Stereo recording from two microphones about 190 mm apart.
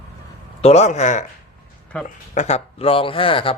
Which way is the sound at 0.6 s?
35° left (ahead or behind).